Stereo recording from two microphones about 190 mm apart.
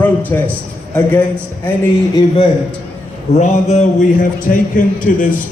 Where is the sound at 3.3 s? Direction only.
35° left (ahead or behind).